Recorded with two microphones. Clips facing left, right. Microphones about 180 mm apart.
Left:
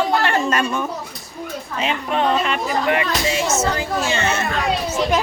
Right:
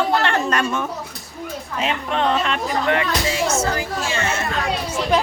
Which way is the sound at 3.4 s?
20° left (ahead or behind).